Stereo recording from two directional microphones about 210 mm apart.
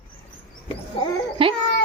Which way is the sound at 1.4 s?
25° right (ahead or behind).